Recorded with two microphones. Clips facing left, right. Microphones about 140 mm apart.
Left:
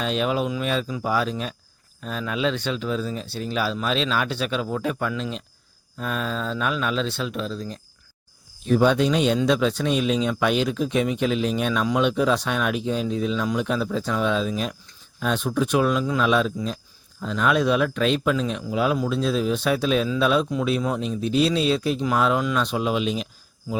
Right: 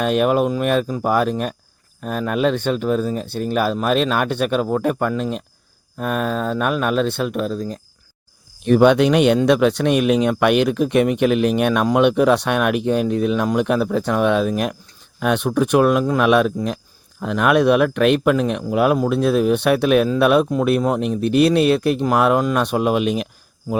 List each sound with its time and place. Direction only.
0.0 s speech: 55° right (ahead or behind)
8.6 s speech: 70° right (ahead or behind)